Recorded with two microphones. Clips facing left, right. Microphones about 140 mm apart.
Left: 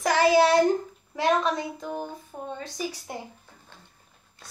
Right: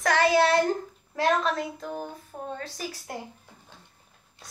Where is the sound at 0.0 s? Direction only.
5° left (ahead or behind).